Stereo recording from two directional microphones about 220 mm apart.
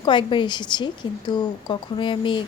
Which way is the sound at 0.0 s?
20° left (ahead or behind).